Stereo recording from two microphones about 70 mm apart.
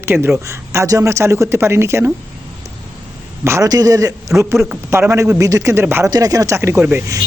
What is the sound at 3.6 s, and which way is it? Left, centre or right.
Speech, right.